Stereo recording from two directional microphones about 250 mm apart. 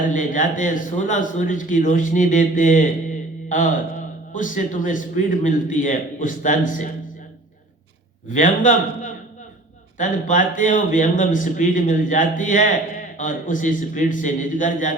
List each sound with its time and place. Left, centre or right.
0.1 s a man's voice: left
8.3 s a man's voice: left